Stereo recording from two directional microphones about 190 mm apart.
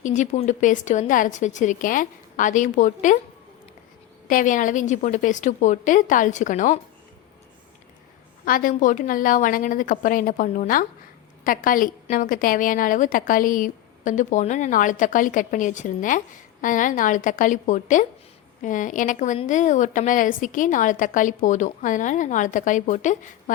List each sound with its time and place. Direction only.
0.0 s a woman's voice: 40° left (ahead or behind)
4.3 s a woman's voice: 45° left (ahead or behind)
8.4 s a woman's voice: 45° left (ahead or behind)